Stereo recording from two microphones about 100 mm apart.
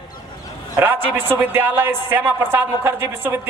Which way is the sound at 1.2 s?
20° right (ahead or behind).